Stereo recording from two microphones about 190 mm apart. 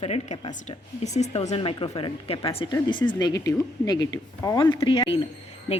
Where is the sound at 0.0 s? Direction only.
30° left (ahead or behind).